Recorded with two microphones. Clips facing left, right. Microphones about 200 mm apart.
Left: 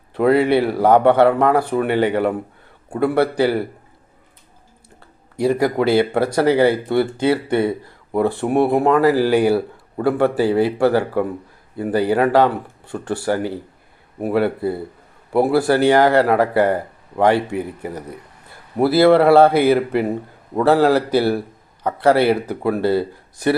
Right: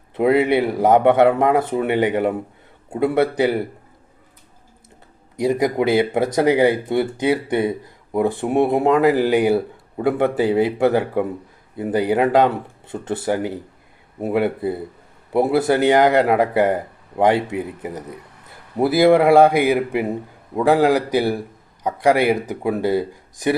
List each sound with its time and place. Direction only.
0.1 s speech: 20° right (ahead or behind)
5.4 s speech: 20° right (ahead or behind)